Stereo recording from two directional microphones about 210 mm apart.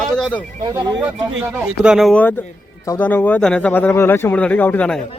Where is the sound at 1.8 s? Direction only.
Centre (ahead or behind).